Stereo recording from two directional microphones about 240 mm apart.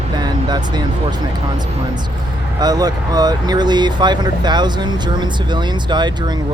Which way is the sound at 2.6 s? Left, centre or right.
Centre.